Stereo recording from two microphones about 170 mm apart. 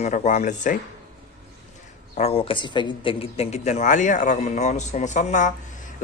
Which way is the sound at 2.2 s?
35° left (ahead or behind).